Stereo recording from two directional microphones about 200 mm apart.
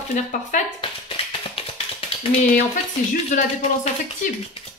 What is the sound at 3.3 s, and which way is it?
Speech, 35° left (ahead or behind).